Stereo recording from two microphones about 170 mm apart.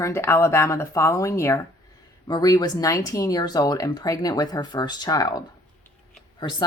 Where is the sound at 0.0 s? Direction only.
15° left (ahead or behind).